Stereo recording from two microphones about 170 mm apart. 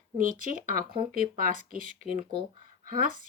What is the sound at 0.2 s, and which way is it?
A woman's voice, 50° right (ahead or behind).